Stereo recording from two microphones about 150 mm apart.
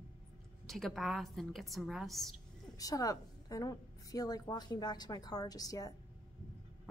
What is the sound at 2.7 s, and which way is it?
A woman's voice, 25° left (ahead or behind).